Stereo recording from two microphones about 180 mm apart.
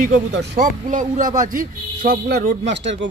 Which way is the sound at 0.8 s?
45° right (ahead or behind).